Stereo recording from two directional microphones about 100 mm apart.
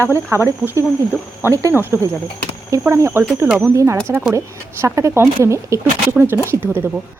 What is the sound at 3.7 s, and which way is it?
A woman's voice, 30° right (ahead or behind).